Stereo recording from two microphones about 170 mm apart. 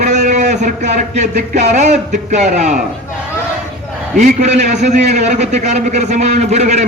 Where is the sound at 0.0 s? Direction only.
45° right (ahead or behind).